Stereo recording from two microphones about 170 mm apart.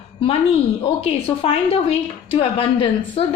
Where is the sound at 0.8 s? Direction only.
35° left (ahead or behind).